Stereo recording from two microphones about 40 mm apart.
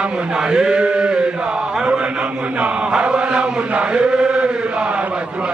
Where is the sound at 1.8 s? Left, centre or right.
Right.